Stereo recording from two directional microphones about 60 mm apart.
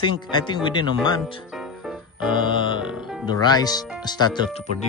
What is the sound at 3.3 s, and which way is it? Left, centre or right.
Speech, left.